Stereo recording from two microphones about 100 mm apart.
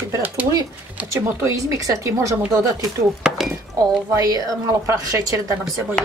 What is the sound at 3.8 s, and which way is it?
A woman's voice, 35° right (ahead or behind).